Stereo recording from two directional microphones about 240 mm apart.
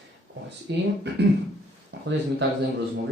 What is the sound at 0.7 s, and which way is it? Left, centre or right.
Speech, right.